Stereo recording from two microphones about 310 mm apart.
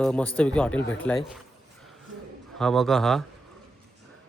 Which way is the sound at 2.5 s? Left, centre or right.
Centre.